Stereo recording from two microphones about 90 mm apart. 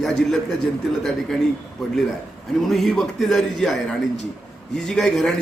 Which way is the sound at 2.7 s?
5° left (ahead or behind).